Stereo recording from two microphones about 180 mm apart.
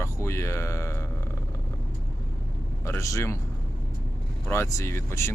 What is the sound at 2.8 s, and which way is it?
Speech, 15° left (ahead or behind).